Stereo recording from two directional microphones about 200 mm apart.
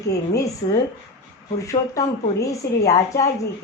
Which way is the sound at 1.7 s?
15° left (ahead or behind).